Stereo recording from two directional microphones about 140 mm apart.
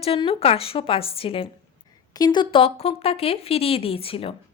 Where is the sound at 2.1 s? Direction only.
30° left (ahead or behind).